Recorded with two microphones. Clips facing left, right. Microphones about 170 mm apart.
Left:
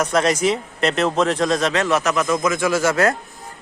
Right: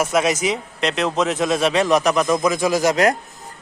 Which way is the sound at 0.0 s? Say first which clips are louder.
Left 1 dB; 5° right (ahead or behind).